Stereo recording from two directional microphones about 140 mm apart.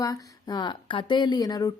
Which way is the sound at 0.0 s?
25° left (ahead or behind).